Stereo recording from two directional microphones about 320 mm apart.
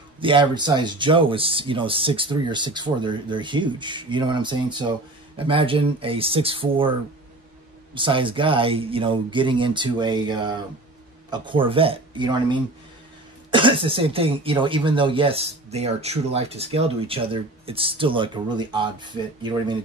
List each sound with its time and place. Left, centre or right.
0.2 s speech: centre
7.9 s speech: centre